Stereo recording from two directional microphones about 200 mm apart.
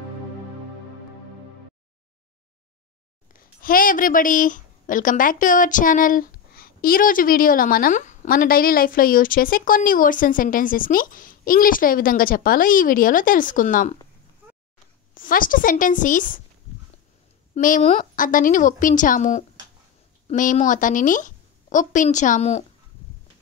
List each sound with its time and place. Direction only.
3.3 s a woman's voice: 45° left (ahead or behind)
15.1 s a woman's voice: 45° left (ahead or behind)
17.6 s a woman's voice: 40° left (ahead or behind)